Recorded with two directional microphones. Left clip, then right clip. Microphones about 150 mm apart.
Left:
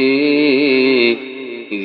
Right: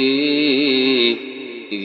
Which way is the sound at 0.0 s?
15° left (ahead or behind).